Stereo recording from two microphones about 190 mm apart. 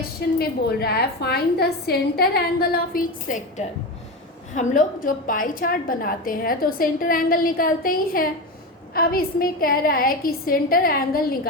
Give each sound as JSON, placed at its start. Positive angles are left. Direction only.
{"t": 0.2, "sound": "a woman's voice", "side_deg": 55}
{"t": 4.5, "sound": "a woman's voice", "side_deg": 40}